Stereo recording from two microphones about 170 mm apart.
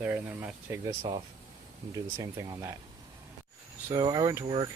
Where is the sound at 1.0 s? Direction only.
30° right (ahead or behind).